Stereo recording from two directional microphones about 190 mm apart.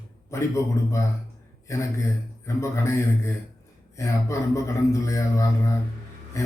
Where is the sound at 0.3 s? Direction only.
15° left (ahead or behind).